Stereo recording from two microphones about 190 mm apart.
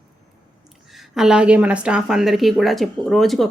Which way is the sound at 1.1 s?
5° right (ahead or behind).